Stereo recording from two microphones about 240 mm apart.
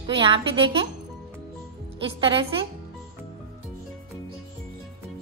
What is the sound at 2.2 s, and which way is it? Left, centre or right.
Speech, right.